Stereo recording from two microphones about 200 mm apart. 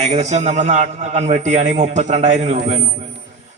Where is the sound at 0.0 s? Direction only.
35° right (ahead or behind).